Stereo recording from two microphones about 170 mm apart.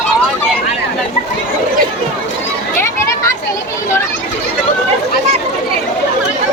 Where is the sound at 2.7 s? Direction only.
15° left (ahead or behind).